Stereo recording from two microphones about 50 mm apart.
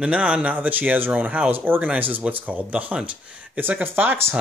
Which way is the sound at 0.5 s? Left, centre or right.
Right.